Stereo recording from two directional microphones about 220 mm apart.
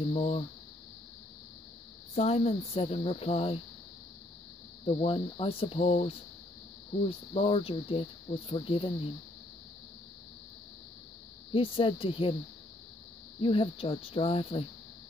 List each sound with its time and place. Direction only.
0.1 s speech: 25° left (ahead or behind)
2.1 s speech: 30° left (ahead or behind)
4.8 s speech: 25° left (ahead or behind)
11.5 s speech: 25° left (ahead or behind)
13.4 s speech: 25° left (ahead or behind)